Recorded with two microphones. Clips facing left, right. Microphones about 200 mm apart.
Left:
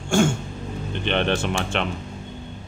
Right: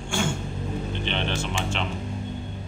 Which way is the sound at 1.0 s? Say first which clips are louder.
Left 9 dB; 60° left (ahead or behind).